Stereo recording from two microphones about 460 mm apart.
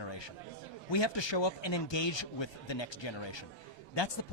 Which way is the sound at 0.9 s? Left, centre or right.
Left.